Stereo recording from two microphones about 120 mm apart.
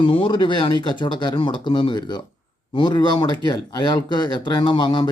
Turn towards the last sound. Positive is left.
turn(degrees=40)  # may be behind; listen again after turning